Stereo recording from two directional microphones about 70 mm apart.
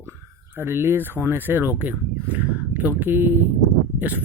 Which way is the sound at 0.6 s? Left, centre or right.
Right.